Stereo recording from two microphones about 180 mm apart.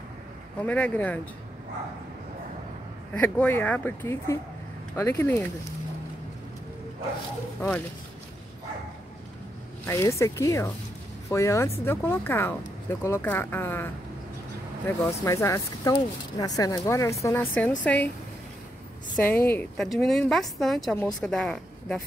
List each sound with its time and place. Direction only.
0.7 s speech: 10° left (ahead or behind)
3.1 s speech: 10° left (ahead or behind)
9.8 s speech: 15° left (ahead or behind)
19.1 s speech: 10° left (ahead or behind)